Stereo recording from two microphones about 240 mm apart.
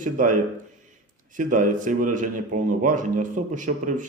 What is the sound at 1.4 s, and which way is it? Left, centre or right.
A man's voice, right.